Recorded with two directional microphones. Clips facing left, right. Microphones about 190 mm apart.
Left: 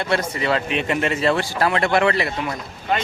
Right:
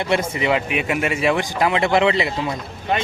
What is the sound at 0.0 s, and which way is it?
Speech, 20° right (ahead or behind).